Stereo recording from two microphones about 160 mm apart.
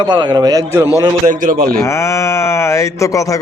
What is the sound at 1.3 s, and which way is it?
Speech, 60° right (ahead or behind).